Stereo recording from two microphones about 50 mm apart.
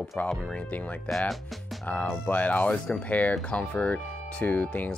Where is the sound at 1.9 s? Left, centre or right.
Left.